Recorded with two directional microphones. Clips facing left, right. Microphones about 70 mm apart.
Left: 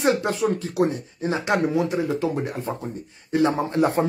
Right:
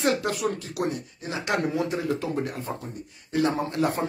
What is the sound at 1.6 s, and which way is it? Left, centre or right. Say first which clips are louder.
Speech: left 4 dB; centre.